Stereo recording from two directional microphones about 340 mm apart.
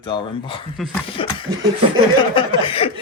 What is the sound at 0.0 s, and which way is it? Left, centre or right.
Speech, centre.